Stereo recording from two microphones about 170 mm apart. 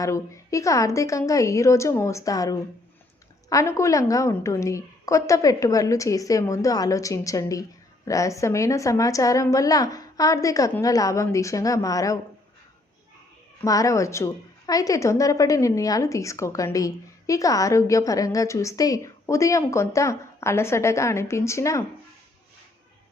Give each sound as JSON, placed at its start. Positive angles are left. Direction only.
{"t": 0.0, "sound": "a woman's voice", "side_deg": 20}
{"t": 13.6, "sound": "a woman's voice", "side_deg": 20}